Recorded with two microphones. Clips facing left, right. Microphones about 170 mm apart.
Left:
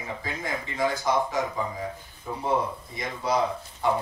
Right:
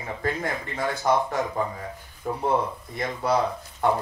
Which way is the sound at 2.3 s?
55° right (ahead or behind).